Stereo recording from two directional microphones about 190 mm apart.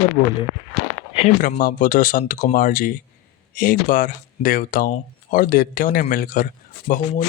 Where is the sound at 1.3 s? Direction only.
45° left (ahead or behind).